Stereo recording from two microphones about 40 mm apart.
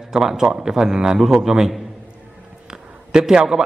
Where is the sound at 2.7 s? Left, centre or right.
Centre.